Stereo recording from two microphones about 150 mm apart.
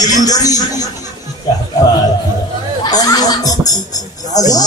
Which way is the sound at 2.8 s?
25° left (ahead or behind).